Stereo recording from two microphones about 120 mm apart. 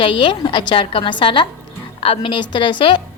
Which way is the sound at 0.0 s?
45° left (ahead or behind).